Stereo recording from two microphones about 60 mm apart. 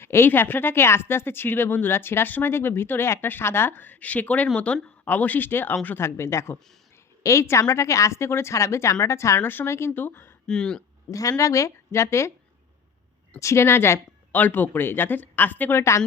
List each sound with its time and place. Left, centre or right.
0.0 s speech: left
6.0 s speech: left
7.2 s a woman's voice: left
9.4 s speech: left
9.6 s speech: left
10.4 s speech: centre
11.1 s a woman's voice: left
13.4 s speech: left
14.3 s speech: left
15.7 s speech: left